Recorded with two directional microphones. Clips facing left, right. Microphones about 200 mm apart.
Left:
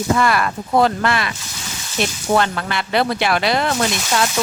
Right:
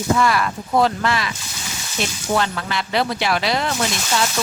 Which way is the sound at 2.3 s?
55° left (ahead or behind).